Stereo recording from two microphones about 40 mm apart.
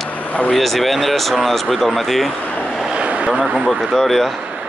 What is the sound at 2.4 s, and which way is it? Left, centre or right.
Vehicle, left.